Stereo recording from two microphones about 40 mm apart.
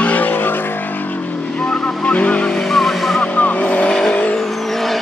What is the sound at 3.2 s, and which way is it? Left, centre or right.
Vehicle, left.